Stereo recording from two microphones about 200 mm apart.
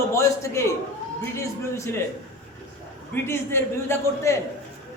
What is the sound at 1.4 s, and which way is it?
Speech, 15° left (ahead or behind).